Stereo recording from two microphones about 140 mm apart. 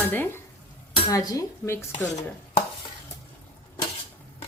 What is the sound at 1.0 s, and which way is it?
Speech, 25° left (ahead or behind).